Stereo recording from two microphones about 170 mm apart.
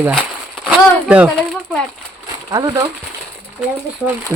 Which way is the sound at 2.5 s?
20° right (ahead or behind).